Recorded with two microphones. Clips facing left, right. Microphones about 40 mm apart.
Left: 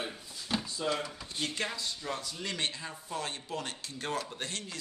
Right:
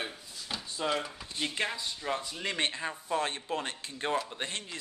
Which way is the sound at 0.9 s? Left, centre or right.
Centre.